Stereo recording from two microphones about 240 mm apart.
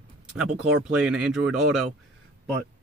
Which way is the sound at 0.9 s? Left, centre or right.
Centre.